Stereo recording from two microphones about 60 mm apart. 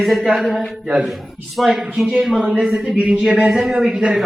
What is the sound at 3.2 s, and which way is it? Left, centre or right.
Speech, centre.